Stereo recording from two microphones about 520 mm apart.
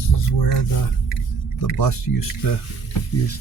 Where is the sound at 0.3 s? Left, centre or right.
Left.